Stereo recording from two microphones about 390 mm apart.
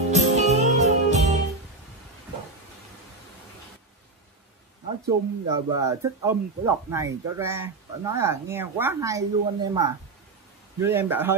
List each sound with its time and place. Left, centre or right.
0.1 s music: centre
5.0 s a man's voice: centre